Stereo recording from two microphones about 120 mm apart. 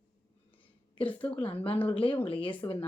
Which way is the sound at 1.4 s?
50° left (ahead or behind).